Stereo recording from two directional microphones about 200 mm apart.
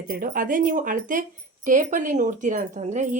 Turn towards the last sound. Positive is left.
turn(degrees=-35)  # may be behind; listen again after turning